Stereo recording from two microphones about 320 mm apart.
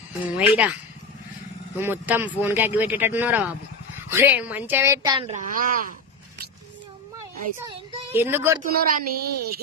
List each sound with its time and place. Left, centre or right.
0.3 s speech: centre; by 5.8 s right
7.7 s a child's voice: centre
8.6 s a woman's voice: right